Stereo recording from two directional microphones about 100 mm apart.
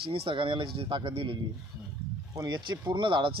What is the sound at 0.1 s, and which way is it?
Speech, 60° right (ahead or behind).